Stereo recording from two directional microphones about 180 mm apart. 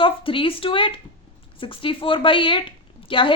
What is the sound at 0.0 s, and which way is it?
A woman's voice, 30° left (ahead or behind).